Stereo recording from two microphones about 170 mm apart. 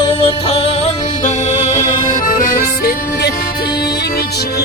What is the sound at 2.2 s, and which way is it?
Music, 55° left (ahead or behind).